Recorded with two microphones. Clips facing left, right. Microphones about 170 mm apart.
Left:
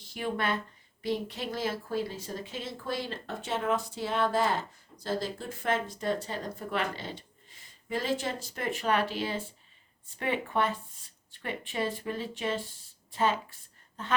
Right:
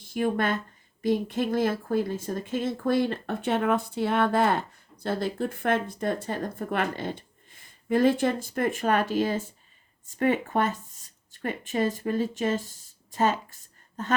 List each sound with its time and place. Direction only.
0.0 s speech: 50° right (ahead or behind)